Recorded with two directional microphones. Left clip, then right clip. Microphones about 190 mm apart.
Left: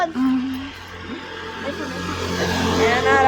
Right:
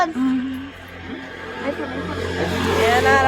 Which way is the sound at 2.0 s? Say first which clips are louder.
Left 1 dB; 60° left (ahead or behind).